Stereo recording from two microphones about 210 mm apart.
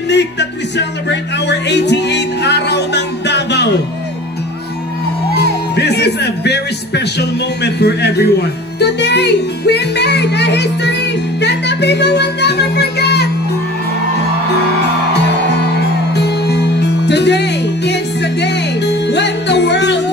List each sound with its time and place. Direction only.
0.1 s speech: 55° left (ahead or behind)
5.8 s speech: 50° left (ahead or behind)
16.1 s music: 50° left (ahead or behind)